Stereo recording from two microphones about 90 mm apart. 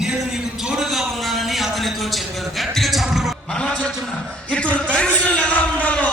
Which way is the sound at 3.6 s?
10° left (ahead or behind).